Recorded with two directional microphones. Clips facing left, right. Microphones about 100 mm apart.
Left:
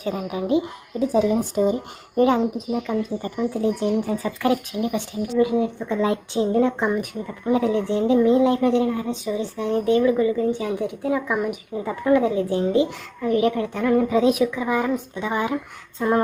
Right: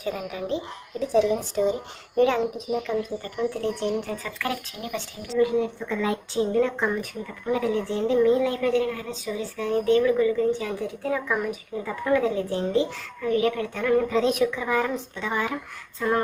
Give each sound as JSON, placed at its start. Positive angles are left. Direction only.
{"t": 0.0, "sound": "a woman's voice", "side_deg": 20}